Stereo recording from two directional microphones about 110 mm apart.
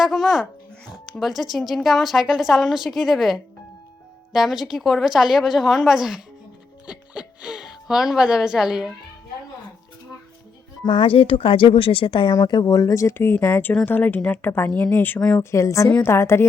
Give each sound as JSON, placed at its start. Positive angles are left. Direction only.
{"t": 0.0, "sound": "a woman's voice", "side_deg": 0}
{"t": 10.8, "sound": "speech", "side_deg": 50}
{"t": 12.3, "sound": "a woman's voice", "side_deg": 35}